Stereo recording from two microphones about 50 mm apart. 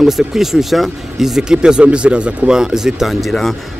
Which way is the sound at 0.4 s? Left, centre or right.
Centre.